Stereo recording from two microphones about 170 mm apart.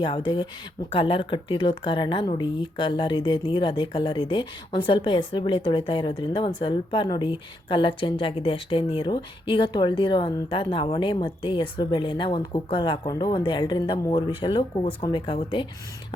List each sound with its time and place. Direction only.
0.0 s speech: 30° left (ahead or behind)